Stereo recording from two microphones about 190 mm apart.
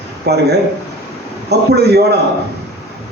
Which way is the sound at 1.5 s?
60° right (ahead or behind).